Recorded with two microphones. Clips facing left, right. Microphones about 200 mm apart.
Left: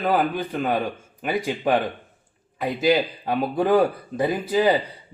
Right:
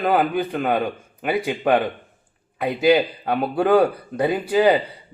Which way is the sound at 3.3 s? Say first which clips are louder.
Right 2 dB; 5° right (ahead or behind).